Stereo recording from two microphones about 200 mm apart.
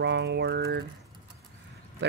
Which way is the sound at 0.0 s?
55° right (ahead or behind).